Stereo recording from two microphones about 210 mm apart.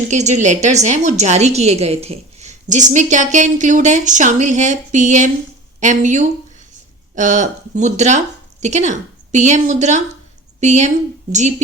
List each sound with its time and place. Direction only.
0.1 s a woman's voice: 35° right (ahead or behind)